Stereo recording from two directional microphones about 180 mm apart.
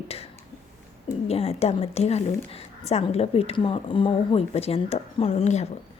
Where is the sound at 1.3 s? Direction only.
35° left (ahead or behind).